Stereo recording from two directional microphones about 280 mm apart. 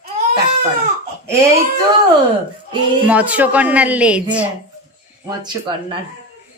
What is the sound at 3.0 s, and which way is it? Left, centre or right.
A woman's voice, centre.